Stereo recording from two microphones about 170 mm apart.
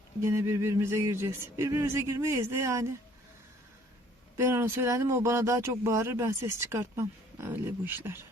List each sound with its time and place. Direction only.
0.2 s speech: 15° right (ahead or behind)
4.4 s speech: 15° right (ahead or behind)